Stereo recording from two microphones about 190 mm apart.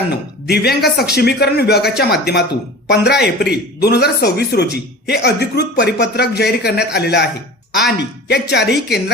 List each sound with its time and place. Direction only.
0.4 s speech: 60° left (ahead or behind)